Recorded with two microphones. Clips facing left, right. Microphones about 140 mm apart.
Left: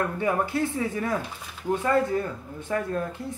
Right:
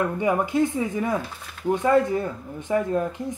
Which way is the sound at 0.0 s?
15° right (ahead or behind).